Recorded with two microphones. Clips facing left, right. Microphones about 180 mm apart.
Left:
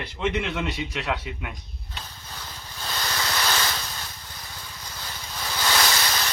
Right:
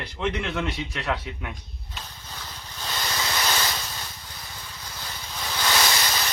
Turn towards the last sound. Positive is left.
turn(degrees=0)  # may be behind; listen again after turning